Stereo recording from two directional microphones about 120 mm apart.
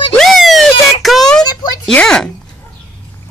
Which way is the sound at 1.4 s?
35° left (ahead or behind).